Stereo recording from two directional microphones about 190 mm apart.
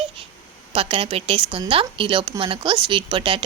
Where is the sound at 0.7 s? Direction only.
30° right (ahead or behind).